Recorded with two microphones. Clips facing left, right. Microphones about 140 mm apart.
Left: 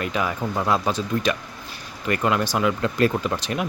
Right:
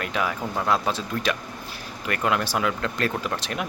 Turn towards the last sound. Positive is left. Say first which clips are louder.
# left 3 dB
turn(degrees=0)  # may be behind; listen again after turning